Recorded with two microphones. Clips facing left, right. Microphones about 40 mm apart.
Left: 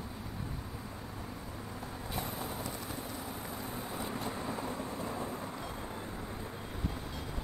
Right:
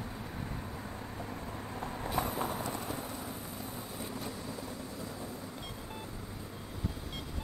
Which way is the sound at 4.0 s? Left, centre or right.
Left.